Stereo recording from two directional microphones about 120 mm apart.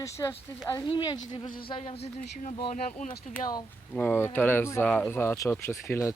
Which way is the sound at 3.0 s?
90° left.